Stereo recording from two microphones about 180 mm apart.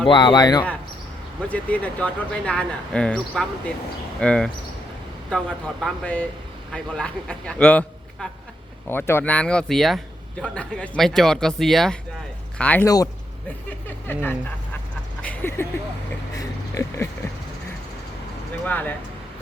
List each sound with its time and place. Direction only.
0.1 s speech: 25° left (ahead or behind)
1.5 s speech: 10° left (ahead or behind)
15.2 s a sound: 10° left (ahead or behind)
16.4 s speech: 20° left (ahead or behind)
18.6 s speech: 10° left (ahead or behind)